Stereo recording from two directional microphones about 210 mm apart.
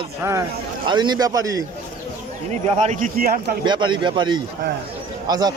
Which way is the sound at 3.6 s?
20° right (ahead or behind).